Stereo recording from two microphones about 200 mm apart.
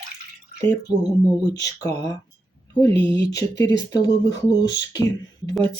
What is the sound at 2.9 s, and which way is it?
Speech, 60° left (ahead or behind).